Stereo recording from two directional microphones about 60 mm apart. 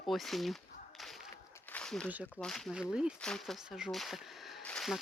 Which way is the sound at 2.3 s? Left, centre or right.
Centre.